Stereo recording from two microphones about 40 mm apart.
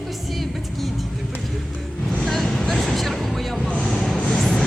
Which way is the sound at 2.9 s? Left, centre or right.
Centre.